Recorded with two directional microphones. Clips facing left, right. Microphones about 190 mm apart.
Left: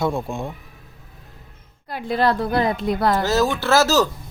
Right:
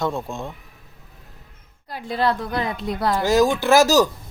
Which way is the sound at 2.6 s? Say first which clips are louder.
Left 4 dB; 50° left (ahead or behind).